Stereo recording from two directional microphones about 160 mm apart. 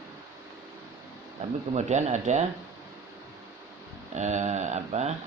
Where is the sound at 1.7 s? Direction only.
45° right (ahead or behind).